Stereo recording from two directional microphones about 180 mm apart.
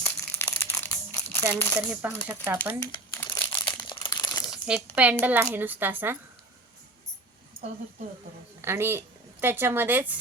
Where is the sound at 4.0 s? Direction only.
25° left (ahead or behind).